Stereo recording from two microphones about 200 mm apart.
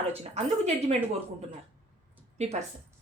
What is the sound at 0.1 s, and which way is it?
Speech, 30° right (ahead or behind).